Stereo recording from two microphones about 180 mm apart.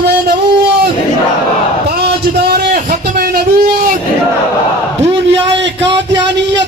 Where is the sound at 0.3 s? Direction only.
65° right (ahead or behind).